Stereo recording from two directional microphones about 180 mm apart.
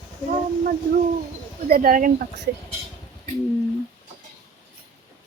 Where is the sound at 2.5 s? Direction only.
65° right (ahead or behind).